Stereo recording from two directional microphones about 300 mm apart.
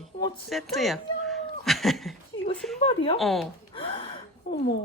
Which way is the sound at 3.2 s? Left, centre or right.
Centre.